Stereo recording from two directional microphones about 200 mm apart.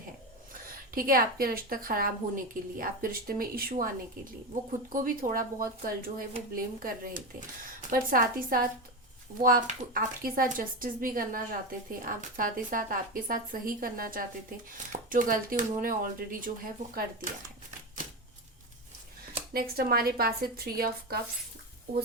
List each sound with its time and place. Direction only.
0.9 s speech: 45° right (ahead or behind)
19.5 s speech: 50° right (ahead or behind)